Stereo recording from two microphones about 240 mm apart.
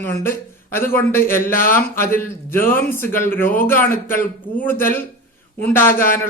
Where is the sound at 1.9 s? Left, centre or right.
Centre.